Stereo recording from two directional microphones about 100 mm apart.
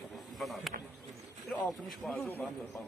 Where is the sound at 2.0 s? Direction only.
Centre (ahead or behind).